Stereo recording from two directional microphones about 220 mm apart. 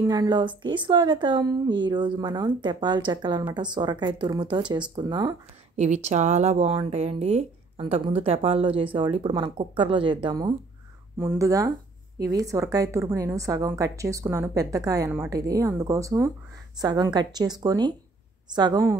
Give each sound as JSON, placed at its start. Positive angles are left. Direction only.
{"t": 0.0, "sound": "speech", "side_deg": -15}
{"t": 5.8, "sound": "a woman's voice", "side_deg": -30}